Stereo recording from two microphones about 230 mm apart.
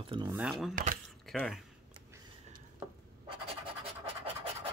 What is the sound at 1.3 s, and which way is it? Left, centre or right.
Speech, centre.